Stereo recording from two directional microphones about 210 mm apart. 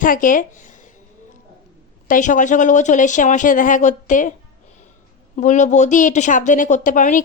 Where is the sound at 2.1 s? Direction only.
40° left (ahead or behind).